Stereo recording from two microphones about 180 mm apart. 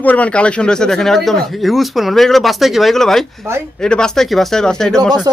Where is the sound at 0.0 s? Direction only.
10° left (ahead or behind).